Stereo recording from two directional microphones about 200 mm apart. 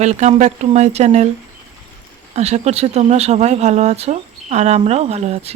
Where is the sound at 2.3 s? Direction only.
35° right (ahead or behind).